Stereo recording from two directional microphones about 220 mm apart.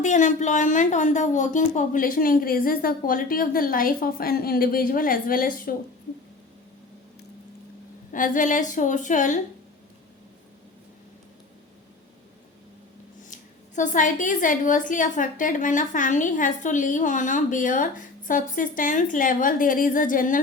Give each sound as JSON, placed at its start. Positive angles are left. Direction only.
{"t": 0.0, "sound": "a woman's voice", "side_deg": 35}
{"t": 8.1, "sound": "a woman's voice", "side_deg": 35}
{"t": 13.3, "sound": "a woman's voice", "side_deg": 35}